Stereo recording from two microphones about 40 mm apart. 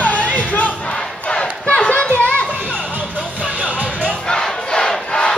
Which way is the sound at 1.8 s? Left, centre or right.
Left.